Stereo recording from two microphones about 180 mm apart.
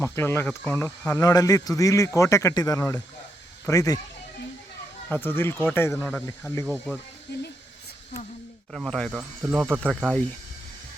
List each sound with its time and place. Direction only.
0.0 s speech: 15° left (ahead or behind)
0.8 s speech: 15° left (ahead or behind)
5.0 s speech: 10° left (ahead or behind)
6.7 s speech: 5° left (ahead or behind)
8.7 s speech: centre (ahead or behind)